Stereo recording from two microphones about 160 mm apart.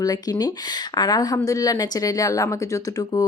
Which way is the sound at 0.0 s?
25° left (ahead or behind).